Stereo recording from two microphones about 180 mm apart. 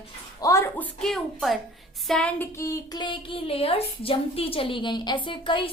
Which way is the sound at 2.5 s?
15° left (ahead or behind).